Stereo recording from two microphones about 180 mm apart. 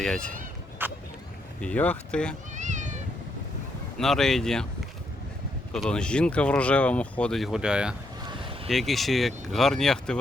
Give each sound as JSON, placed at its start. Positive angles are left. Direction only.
{"t": 0.0, "sound": "speech", "side_deg": 5}
{"t": 0.8, "sound": "a sound", "side_deg": -10}
{"t": 1.6, "sound": "speech", "side_deg": 10}
{"t": 2.6, "sound": "cat", "side_deg": -40}
{"t": 3.9, "sound": "speech", "side_deg": 0}
{"t": 5.7, "sound": "speech", "side_deg": 5}